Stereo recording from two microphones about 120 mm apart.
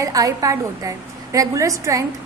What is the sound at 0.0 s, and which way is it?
A woman's voice, 30° right (ahead or behind).